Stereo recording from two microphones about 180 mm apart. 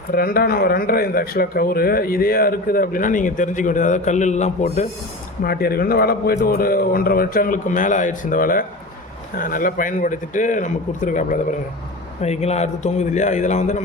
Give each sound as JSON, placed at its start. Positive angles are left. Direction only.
{"t": 0.1, "sound": "a man's voice", "side_deg": 55}
{"t": 5.4, "sound": "a man's voice", "side_deg": 55}